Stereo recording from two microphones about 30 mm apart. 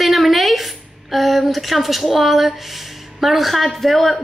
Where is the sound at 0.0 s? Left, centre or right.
Centre.